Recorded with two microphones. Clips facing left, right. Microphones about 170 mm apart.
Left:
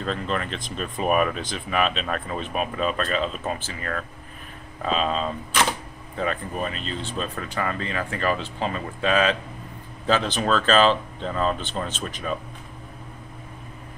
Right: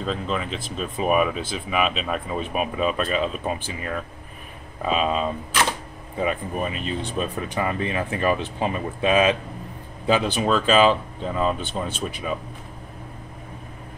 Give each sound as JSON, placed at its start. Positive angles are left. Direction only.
{"t": 0.0, "sound": "speech", "side_deg": 0}